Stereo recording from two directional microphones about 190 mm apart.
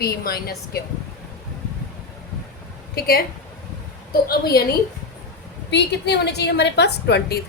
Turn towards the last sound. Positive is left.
turn(degrees=60)  # may be behind; listen again after turning